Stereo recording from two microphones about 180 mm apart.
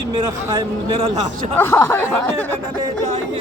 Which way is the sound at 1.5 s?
15° left (ahead or behind).